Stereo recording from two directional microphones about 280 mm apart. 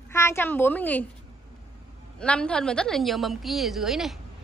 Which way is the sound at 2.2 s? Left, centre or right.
Centre.